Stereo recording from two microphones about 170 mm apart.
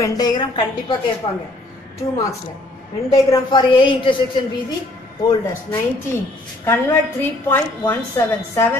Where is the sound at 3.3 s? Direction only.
25° left (ahead or behind).